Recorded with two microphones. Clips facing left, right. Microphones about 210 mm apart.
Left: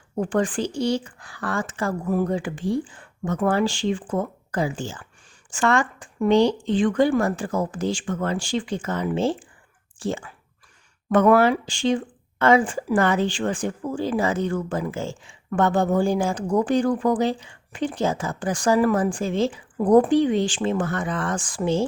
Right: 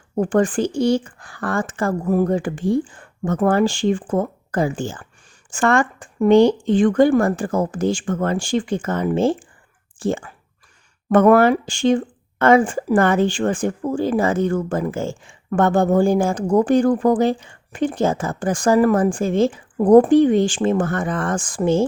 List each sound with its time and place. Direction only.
0.2 s speech: 50° right (ahead or behind)